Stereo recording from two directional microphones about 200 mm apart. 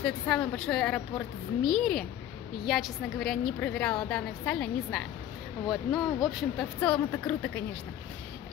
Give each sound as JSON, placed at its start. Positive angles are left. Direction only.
{"t": 0.0, "sound": "a woman's voice", "side_deg": 5}